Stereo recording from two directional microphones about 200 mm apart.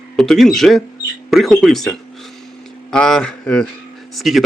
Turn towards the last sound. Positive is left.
turn(degrees=0)  # may be behind; listen again after turning